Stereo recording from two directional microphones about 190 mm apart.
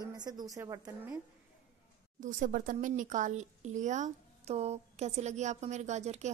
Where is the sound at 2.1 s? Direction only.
40° right (ahead or behind).